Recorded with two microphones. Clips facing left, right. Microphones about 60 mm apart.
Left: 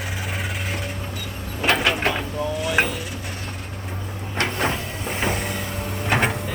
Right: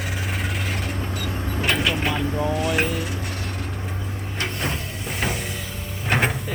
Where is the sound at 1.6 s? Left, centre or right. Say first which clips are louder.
Left 3 dB; left.